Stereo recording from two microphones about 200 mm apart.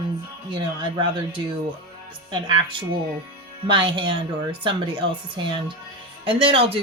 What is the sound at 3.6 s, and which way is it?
Speech, 25° right (ahead or behind).